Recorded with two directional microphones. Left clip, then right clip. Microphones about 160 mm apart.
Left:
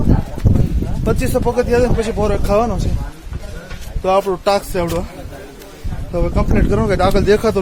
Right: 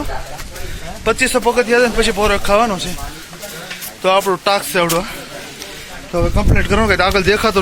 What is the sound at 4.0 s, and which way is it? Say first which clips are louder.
Speech: right 1 dB; 5° left (ahead or behind).